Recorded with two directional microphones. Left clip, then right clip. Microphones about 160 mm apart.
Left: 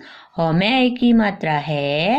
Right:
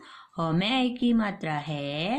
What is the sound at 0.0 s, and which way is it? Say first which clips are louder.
Speech: left 10 dB; 20° left (ahead or behind).